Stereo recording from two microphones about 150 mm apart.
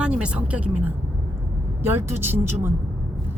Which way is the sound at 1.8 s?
15° right (ahead or behind).